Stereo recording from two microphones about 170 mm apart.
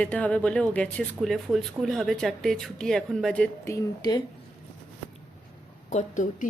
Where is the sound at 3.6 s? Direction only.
20° left (ahead or behind).